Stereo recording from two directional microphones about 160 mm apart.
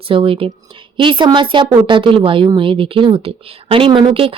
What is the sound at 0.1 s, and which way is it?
Speech, 35° right (ahead or behind).